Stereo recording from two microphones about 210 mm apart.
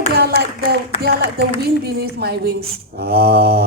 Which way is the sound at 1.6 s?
50° right (ahead or behind).